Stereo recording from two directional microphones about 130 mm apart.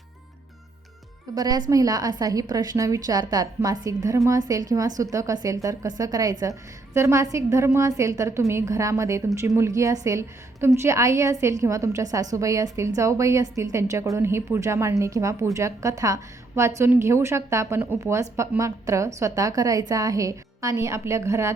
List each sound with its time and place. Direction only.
1.4 s a woman's voice: 30° right (ahead or behind)